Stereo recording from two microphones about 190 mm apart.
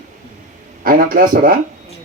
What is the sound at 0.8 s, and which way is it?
Speech, 50° right (ahead or behind).